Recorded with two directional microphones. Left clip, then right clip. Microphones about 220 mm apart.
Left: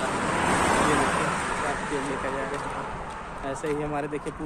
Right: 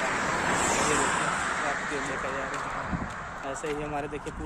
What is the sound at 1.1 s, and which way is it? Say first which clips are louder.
Vehicle: left 1 dB; 50° left (ahead or behind).